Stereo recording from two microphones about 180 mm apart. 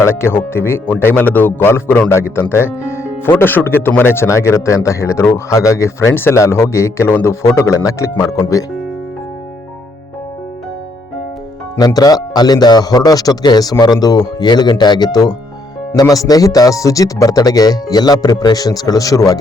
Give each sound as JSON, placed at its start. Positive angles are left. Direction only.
{"t": 0.0, "sound": "speech", "side_deg": 15}
{"t": 11.8, "sound": "speech", "side_deg": 20}